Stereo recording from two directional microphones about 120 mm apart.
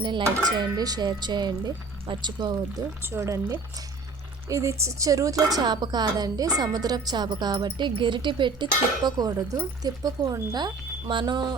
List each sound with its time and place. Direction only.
0.5 s speech: 35° right (ahead or behind)
3.0 s speech: 20° right (ahead or behind)
4.4 s speech: 25° right (ahead or behind)